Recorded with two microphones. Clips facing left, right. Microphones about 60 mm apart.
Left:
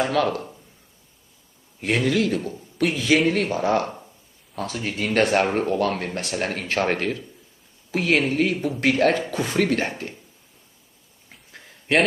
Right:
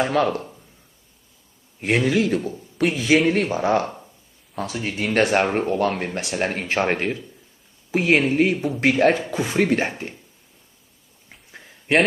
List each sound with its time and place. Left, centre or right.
0.3 s speech: centre
1.8 s speech: centre
9.6 s speech: centre
11.2 s a sound: centre